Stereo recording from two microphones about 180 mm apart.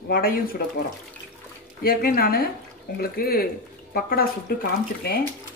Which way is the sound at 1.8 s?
55° left (ahead or behind).